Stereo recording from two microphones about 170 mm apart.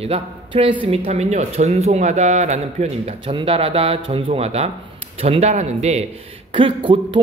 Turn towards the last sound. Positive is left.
turn(degrees=-30)  # may be behind; listen again after turning